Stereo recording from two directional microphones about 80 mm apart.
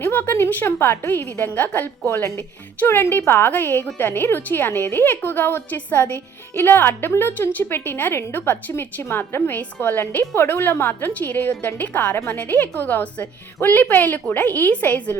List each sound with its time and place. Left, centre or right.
0.0 s a woman's voice: left